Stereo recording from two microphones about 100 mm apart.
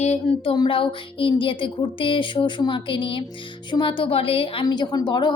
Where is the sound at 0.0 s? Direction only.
90° left.